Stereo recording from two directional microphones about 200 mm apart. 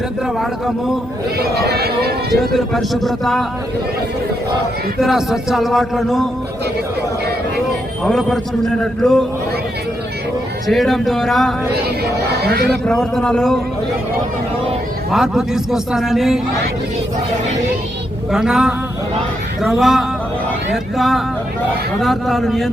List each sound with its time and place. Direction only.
1.4 s speech: 55° right (ahead or behind)
2.6 s a man's voice: centre (ahead or behind)
4.9 s a man's voice: centre (ahead or behind)
8.0 s a man's voice: centre (ahead or behind)
10.7 s a man's voice: centre (ahead or behind)
11.7 s speech: 50° right (ahead or behind)
12.8 s a man's voice: 5° left (ahead or behind)
15.1 s a man's voice: centre (ahead or behind)
18.3 s a man's voice: 5° right (ahead or behind)